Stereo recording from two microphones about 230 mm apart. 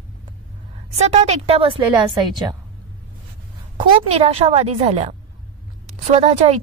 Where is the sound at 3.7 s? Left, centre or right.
Right.